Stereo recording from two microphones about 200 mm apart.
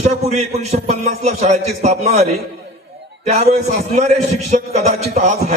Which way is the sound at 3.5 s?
35° right (ahead or behind).